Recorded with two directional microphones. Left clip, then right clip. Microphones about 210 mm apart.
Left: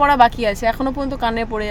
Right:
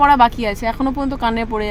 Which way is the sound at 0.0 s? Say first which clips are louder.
Right 1 dB; centre (ahead or behind).